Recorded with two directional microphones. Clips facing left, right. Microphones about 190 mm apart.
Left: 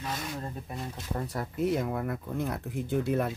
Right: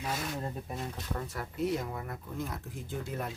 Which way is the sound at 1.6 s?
55° left (ahead or behind).